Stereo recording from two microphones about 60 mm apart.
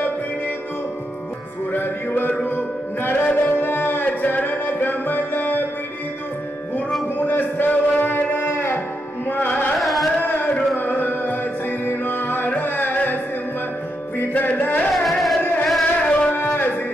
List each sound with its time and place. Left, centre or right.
1.7 s music: left
7.2 s a sound: left
8.5 s music: left
9.3 s carnatic music: left
9.8 s carnatic music: centre
10.2 s music: left
14.9 s music: centre
15.8 s tabla: centre
16.3 s music: left